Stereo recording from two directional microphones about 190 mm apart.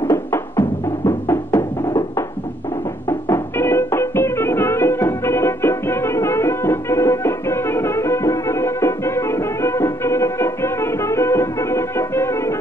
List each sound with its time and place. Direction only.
0.0 s music: 15° left (ahead or behind)